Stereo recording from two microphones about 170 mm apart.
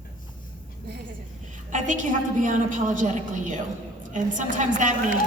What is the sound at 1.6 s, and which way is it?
A woman's voice, 50° right (ahead or behind).